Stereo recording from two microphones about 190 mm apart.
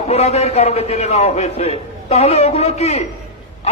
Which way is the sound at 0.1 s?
35° left (ahead or behind).